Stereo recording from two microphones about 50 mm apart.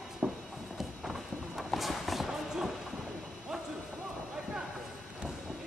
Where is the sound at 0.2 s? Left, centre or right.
Centre.